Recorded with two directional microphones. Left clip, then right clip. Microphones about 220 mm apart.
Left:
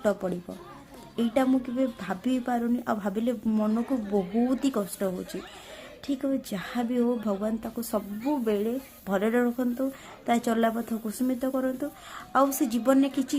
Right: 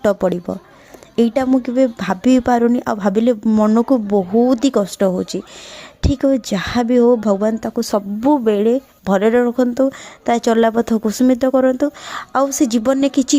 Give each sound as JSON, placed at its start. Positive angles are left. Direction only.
{"t": 0.0, "sound": "speech", "side_deg": -45}